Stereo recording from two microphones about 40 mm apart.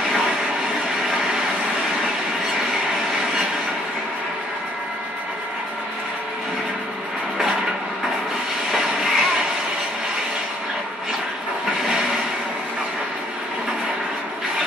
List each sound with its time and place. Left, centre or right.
8.7 s vehicle: centre